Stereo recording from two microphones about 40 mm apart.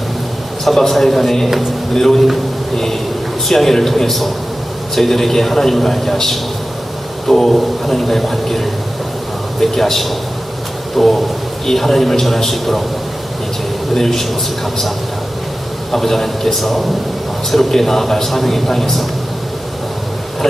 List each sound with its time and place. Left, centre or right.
0.6 s a man's voice: centre
13.9 s a man's voice: centre
15.9 s a man's voice: centre